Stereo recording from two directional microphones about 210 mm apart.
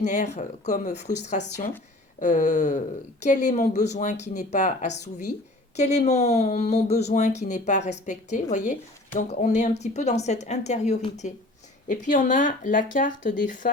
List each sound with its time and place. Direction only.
0.0 s speech: 35° left (ahead or behind)
2.1 s speech: 35° left (ahead or behind)